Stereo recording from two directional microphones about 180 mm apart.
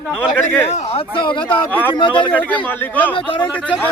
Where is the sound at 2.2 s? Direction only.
10° left (ahead or behind).